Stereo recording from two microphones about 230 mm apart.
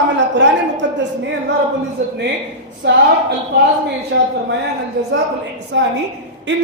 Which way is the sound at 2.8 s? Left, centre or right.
Right.